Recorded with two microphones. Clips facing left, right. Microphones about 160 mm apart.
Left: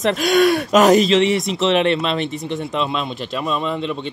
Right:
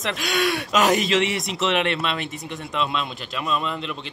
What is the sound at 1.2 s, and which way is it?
Speech, centre (ahead or behind).